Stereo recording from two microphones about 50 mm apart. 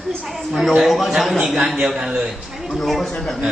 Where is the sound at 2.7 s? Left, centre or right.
Centre.